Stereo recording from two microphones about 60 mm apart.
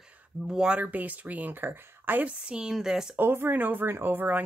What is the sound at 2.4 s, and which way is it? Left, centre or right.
Speech, centre.